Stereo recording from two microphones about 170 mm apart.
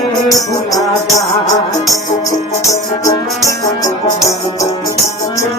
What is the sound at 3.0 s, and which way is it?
Music, 20° left (ahead or behind).